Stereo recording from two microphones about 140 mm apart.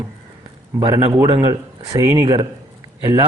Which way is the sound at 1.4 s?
25° right (ahead or behind).